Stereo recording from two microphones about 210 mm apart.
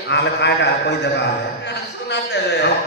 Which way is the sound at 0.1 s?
55° left (ahead or behind).